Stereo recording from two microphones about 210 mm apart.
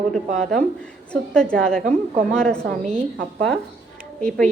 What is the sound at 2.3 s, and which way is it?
Speech, 5° left (ahead or behind).